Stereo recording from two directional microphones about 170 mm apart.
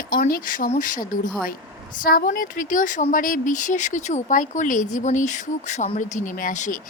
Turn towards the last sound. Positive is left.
turn(degrees=50)  # may be behind; listen again after turning